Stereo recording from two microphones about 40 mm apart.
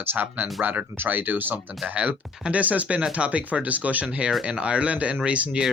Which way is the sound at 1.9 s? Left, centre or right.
Right.